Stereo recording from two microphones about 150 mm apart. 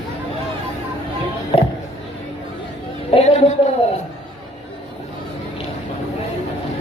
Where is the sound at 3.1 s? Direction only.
45° left (ahead or behind).